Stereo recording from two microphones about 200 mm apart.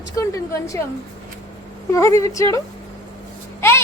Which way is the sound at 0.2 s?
15° left (ahead or behind).